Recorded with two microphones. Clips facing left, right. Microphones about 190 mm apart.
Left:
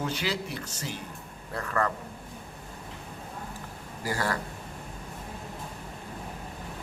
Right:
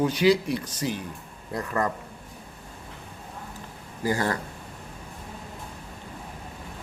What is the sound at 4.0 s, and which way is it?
Speech, 25° right (ahead or behind).